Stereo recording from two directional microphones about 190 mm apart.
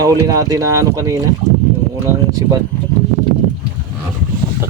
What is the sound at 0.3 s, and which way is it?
Speech, 20° right (ahead or behind).